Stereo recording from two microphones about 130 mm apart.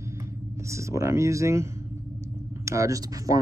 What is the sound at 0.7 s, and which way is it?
Speech, 25° right (ahead or behind).